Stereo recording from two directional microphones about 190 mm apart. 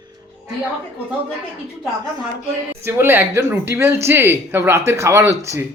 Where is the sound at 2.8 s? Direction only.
10° right (ahead or behind).